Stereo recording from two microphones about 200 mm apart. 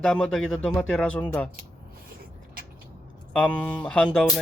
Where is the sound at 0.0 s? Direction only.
5° left (ahead or behind).